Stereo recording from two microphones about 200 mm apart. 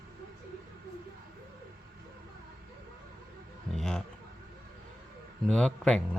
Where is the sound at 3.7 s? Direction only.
Centre (ahead or behind).